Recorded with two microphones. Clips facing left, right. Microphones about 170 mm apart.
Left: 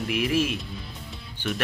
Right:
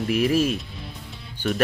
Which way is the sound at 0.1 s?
40° right (ahead or behind).